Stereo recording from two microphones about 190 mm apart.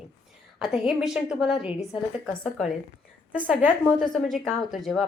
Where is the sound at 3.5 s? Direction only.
5° right (ahead or behind).